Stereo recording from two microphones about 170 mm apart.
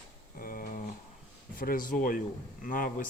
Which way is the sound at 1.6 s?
55° left (ahead or behind).